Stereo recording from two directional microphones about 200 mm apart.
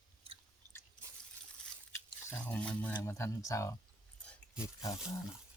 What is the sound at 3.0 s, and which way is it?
Speech, 15° left (ahead or behind).